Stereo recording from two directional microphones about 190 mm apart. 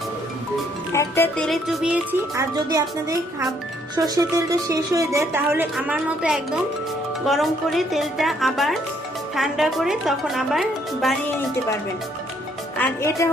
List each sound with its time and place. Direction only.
0.9 s speech: 15° left (ahead or behind)
2.3 s speech: 15° right (ahead or behind); by 11.1 s centre (ahead or behind)
12.7 s a woman's voice: 10° left (ahead or behind)